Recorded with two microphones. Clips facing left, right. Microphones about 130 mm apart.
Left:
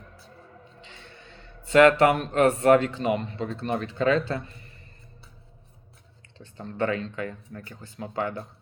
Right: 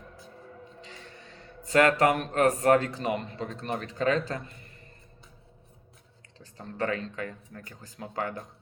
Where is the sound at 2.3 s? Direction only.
40° right (ahead or behind).